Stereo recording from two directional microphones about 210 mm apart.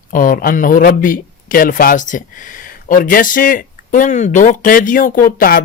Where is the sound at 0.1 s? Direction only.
40° left (ahead or behind).